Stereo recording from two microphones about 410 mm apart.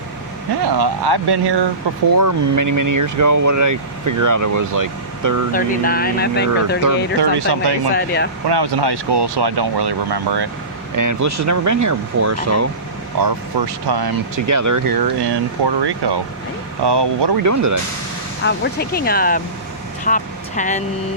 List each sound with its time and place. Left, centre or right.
0.8 s speech: right
2.1 s speech: right
5.5 s speech: left
7.2 s speech: right
7.9 s speech: left
8.4 s speech: right
10.9 s speech: right
13.2 s speech: right
17.3 s speech: right
18.4 s speech: left